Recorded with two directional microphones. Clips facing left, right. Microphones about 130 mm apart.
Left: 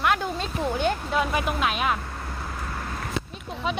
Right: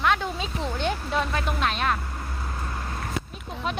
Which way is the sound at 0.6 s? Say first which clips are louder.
Left 4 dB; 5° left (ahead or behind).